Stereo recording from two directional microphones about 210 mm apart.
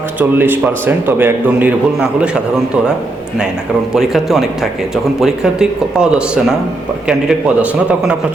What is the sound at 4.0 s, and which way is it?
Speech, centre (ahead or behind).